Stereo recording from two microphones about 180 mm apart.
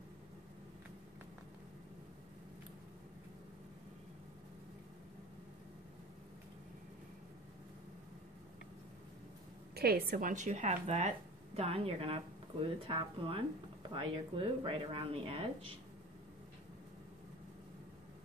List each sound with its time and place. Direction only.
9.8 s speech: 60° right (ahead or behind); by 15.7 s 30° right (ahead or behind)